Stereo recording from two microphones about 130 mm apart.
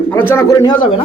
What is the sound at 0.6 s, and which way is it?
Speech, 40° left (ahead or behind).